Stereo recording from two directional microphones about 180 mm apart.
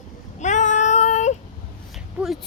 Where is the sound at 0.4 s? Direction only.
40° left (ahead or behind).